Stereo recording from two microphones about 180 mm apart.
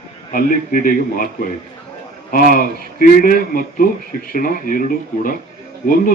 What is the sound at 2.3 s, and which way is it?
A man's voice, 50° left (ahead or behind).